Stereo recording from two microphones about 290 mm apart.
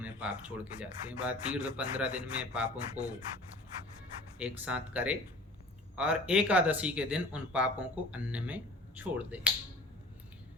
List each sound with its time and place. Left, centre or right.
0.0 s speech: centre
4.4 s speech: centre